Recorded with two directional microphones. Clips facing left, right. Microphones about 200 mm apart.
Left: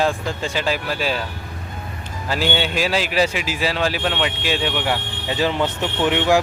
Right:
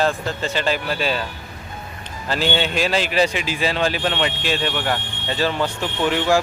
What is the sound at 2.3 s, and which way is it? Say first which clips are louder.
Speech: even; 10° left (ahead or behind).